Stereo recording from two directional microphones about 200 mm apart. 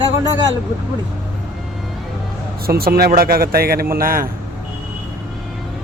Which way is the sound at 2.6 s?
50° right (ahead or behind).